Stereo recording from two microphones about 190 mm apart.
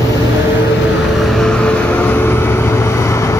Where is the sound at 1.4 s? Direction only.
5° left (ahead or behind).